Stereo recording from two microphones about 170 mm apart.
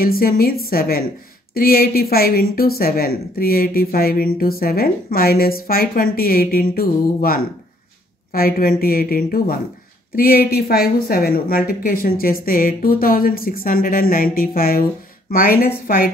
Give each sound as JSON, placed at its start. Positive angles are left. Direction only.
{"t": 0.0, "sound": "a woman's voice", "side_deg": 60}